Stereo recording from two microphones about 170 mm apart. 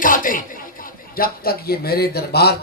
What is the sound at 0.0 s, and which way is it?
Speech, 55° left (ahead or behind).